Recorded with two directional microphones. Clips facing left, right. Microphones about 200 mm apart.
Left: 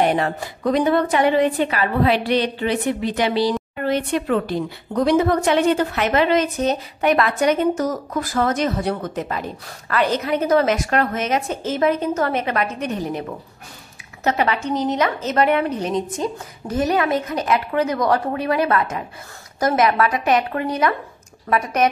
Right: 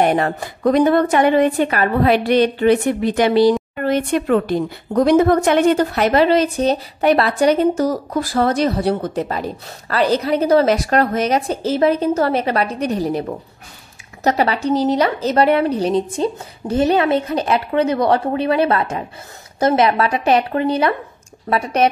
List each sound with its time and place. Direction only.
0.0 s a woman's voice: 50° right (ahead or behind)
14.2 s a woman's voice: 35° right (ahead or behind)